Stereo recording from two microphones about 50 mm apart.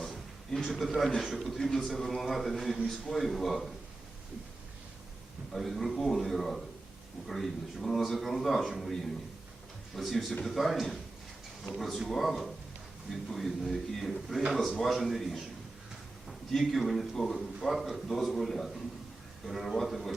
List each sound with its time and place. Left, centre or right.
0.5 s a man's voice: centre
1.2 s a man's voice: centre
1.5 s a man's voice: centre
5.5 s a man's voice: centre
16.5 s a man's voice: centre